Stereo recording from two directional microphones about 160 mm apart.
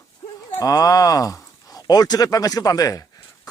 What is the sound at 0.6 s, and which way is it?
Speech, 20° left (ahead or behind).